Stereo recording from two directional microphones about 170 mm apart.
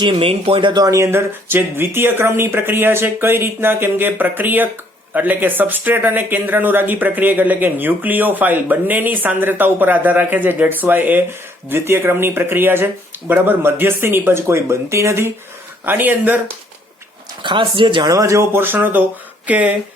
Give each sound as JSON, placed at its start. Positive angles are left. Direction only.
{"t": 0.0, "sound": "speech", "side_deg": -30}
{"t": 17.4, "sound": "speech", "side_deg": -30}